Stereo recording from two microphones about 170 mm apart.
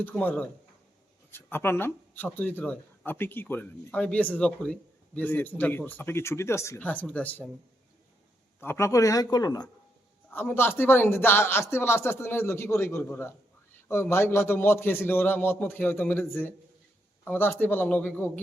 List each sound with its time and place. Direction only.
0.0 s speech: 10° left (ahead or behind)
8.6 s speech: 15° left (ahead or behind)
10.2 s speech: 10° left (ahead or behind)